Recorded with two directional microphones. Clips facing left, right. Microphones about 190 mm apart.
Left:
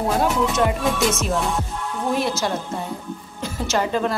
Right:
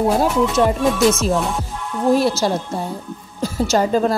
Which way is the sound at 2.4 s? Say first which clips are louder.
Right 4 dB; 35° right (ahead or behind).